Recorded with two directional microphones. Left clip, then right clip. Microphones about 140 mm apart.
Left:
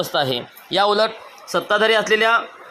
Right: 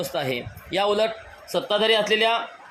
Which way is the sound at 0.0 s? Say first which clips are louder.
Left 6 dB; 20° left (ahead or behind).